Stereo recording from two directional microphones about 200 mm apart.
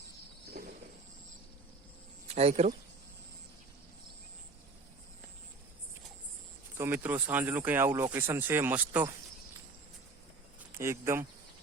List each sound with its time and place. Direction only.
2.2 s speech: 30° right (ahead or behind)
6.7 s speech: 10° right (ahead or behind)
10.8 s speech: 15° right (ahead or behind)